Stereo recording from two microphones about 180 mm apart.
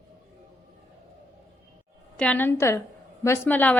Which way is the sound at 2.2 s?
10° left (ahead or behind).